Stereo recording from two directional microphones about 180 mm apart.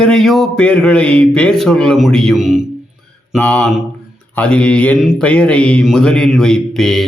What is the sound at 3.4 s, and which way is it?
Mantra, 10° left (ahead or behind).